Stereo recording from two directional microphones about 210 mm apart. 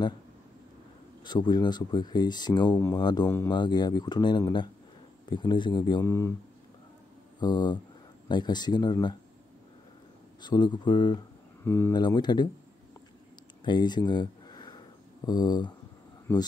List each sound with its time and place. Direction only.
1.2 s speech: 20° left (ahead or behind)
3.5 s speech: 20° left (ahead or behind)
7.3 s speech: 20° left (ahead or behind)
10.4 s speech: 20° left (ahead or behind)
11.6 s speech: 10° left (ahead or behind)
13.7 s speech: 20° left (ahead or behind)
16.3 s speech: 10° left (ahead or behind)